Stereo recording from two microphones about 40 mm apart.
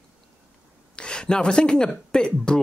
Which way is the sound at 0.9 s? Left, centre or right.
Left.